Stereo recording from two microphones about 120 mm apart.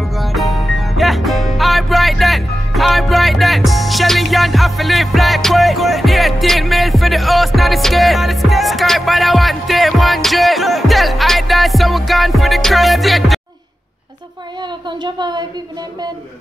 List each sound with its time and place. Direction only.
0.2 s music: centre (ahead or behind)
14.9 s speech: 40° right (ahead or behind)